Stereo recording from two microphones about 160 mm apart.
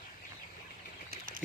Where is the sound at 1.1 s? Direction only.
60° right (ahead or behind).